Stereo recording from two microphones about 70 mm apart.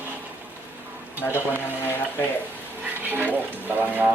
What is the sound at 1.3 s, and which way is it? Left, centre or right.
Speech, left.